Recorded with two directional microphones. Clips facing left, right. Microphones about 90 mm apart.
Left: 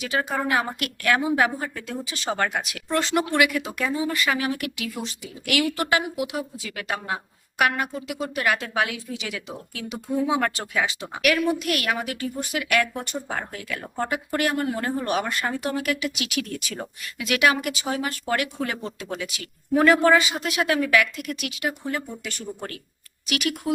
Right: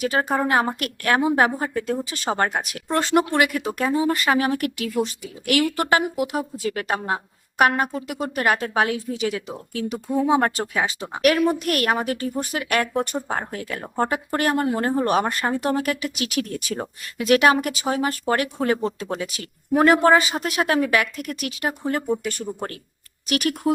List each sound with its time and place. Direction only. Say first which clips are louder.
0.0 s speech: right 4 dB; 45° right (ahead or behind)